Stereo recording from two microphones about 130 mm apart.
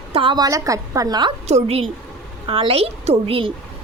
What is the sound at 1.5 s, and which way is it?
Speech, 55° right (ahead or behind).